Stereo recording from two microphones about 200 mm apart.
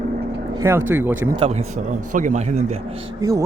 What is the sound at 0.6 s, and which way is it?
Speech, 10° right (ahead or behind).